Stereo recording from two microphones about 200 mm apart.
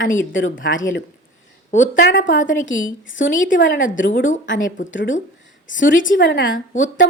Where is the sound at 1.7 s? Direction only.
65° left (ahead or behind).